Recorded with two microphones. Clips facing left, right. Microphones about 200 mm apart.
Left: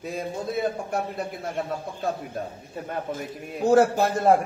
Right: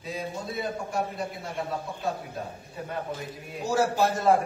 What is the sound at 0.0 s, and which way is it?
Speech, 50° left (ahead or behind).